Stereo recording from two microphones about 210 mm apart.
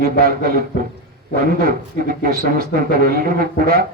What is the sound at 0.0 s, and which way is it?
Speech, 45° right (ahead or behind).